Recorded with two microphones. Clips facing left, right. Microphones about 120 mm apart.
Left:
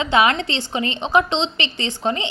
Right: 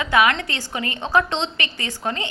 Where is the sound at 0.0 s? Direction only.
25° left (ahead or behind).